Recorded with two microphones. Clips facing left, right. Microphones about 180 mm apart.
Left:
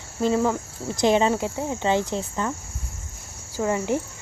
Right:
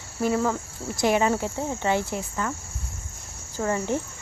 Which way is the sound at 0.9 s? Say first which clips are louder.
Left 2 dB; 20° left (ahead or behind).